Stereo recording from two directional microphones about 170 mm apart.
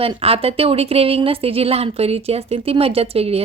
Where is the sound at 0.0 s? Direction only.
35° right (ahead or behind).